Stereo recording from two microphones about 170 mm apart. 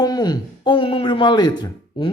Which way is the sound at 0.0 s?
25° left (ahead or behind).